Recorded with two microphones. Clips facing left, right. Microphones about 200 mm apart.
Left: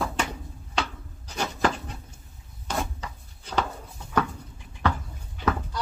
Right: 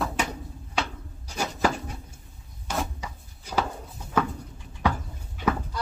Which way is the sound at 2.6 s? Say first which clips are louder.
Even; 10° right (ahead or behind).